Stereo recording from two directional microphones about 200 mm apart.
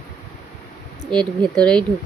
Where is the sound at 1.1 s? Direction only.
5° left (ahead or behind).